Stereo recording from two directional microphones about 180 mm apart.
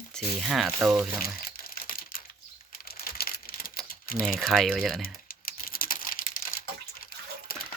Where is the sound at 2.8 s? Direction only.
55° left (ahead or behind).